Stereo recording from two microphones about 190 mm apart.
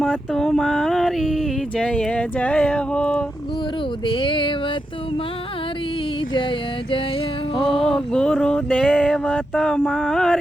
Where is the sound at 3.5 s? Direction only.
25° left (ahead or behind).